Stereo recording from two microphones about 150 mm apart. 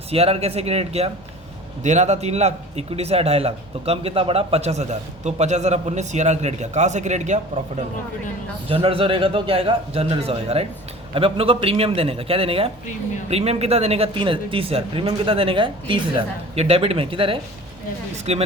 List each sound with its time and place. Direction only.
0.1 s speech: 40° right (ahead or behind)
8.7 s speech: 40° right (ahead or behind)